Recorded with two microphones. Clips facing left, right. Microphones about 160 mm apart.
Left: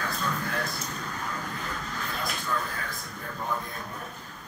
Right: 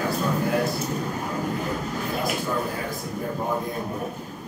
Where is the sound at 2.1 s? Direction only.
15° right (ahead or behind).